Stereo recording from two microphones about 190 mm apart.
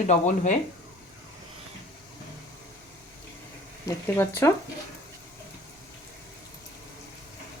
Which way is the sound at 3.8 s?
10° left (ahead or behind).